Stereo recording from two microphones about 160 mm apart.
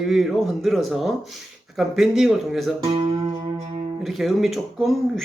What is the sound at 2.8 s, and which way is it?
Music, 35° right (ahead or behind).